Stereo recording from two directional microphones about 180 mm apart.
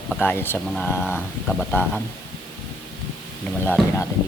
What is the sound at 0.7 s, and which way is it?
Speech, centre (ahead or behind).